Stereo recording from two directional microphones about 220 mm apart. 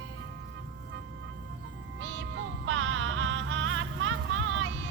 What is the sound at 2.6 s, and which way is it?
Music, 60° right (ahead or behind).